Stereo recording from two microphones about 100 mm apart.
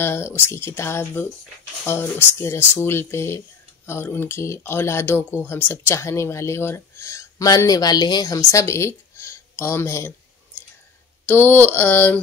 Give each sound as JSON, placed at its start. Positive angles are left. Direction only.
{"t": 0.0, "sound": "speech", "side_deg": 25}